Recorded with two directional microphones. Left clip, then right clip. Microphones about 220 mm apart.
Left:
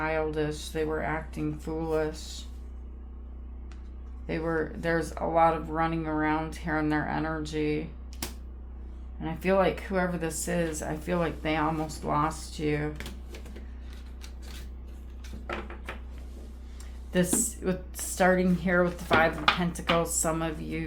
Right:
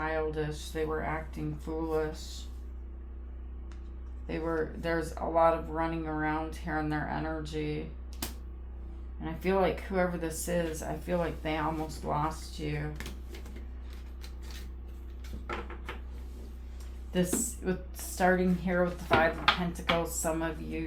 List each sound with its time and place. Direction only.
0.0 s speech: 35° left (ahead or behind)
4.3 s speech: 35° left (ahead or behind)
9.2 s speech: 30° left (ahead or behind)
17.1 s speech: 35° left (ahead or behind)